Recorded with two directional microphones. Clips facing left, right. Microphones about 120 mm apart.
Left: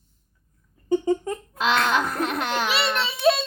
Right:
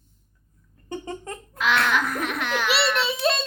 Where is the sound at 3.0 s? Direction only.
Centre (ahead or behind).